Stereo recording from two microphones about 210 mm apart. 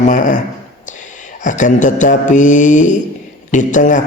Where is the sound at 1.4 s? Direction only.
35° left (ahead or behind).